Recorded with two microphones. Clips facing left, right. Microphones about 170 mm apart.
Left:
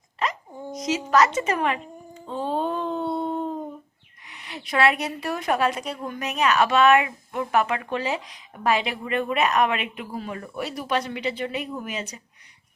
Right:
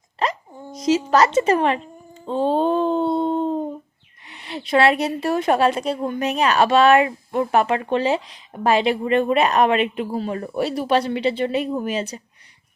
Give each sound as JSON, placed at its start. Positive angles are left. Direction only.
{"t": 0.2, "sound": "dog", "side_deg": -30}
{"t": 0.7, "sound": "a woman's voice", "side_deg": -30}